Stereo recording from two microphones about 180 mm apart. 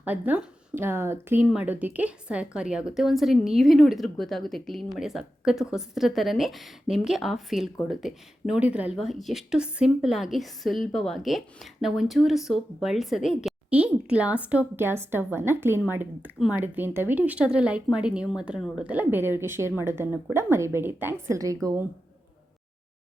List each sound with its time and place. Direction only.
0.0 s speech: 10° right (ahead or behind)